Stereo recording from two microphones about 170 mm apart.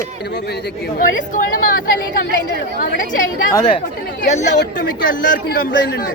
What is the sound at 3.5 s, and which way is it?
Speech, 20° left (ahead or behind).